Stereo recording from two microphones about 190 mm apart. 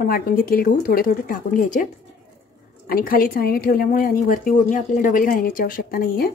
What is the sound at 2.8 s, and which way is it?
A woman's voice, 50° left (ahead or behind).